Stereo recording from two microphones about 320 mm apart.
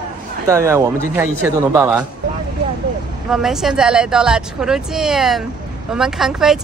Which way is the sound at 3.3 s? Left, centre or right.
Centre.